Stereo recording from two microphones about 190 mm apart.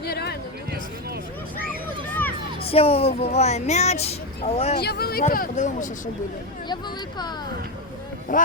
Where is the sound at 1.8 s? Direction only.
10° left (ahead or behind).